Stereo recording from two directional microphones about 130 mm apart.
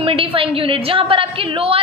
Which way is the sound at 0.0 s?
45° right (ahead or behind).